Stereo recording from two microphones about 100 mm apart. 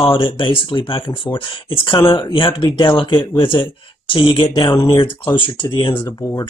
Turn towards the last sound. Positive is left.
turn(degrees=25)  # may be behind; listen again after turning